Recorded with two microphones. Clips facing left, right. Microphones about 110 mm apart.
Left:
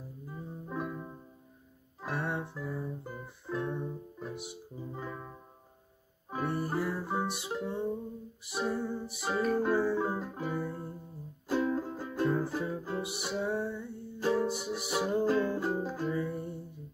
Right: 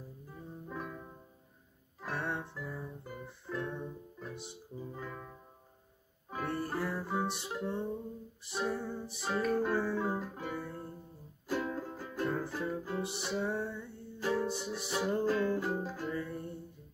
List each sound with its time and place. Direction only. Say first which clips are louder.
0.7 s music: left 6 dB; 20° left (ahead or behind)
6.3 s music: left 3 dB; 15° left (ahead or behind)
15.2 s music: left 2 dB; 20° left (ahead or behind)